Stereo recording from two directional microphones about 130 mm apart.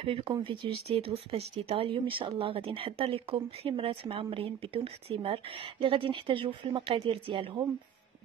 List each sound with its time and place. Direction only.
0.0 s speech: 45° right (ahead or behind)